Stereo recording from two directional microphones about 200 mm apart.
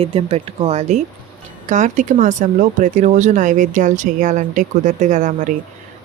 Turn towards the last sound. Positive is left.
turn(degrees=-40)  # may be behind; listen again after turning